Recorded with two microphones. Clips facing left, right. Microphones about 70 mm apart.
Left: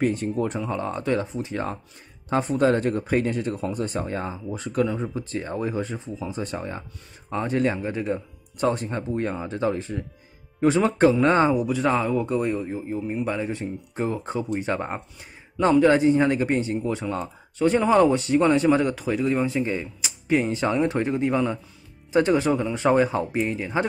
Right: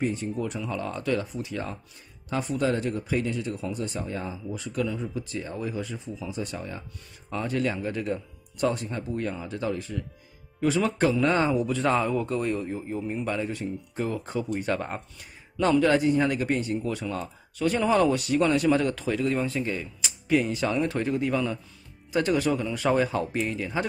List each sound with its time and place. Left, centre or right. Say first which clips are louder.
0.0 s speech: left 5 dB; left
0.4 s speech: left 4 dB; left
11.5 s a man's voice: left 2 dB; centre
13.5 s speech: left 2 dB; left